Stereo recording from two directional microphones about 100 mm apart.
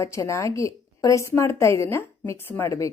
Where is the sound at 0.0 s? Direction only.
30° left (ahead or behind).